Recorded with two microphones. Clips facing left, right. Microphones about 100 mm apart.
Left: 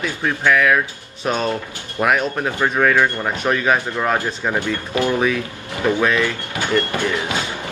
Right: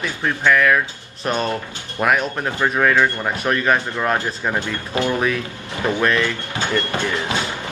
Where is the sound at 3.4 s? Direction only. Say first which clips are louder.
Left 1 dB; 5° left (ahead or behind).